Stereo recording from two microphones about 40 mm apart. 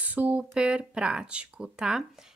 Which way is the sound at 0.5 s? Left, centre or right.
Right.